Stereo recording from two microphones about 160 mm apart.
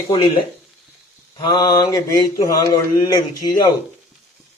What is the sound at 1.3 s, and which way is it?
Speech, 25° left (ahead or behind).